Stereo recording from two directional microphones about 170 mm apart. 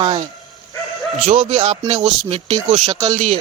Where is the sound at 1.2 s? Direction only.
40° right (ahead or behind).